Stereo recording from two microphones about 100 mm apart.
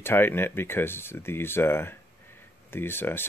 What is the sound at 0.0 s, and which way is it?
Speech, 20° left (ahead or behind).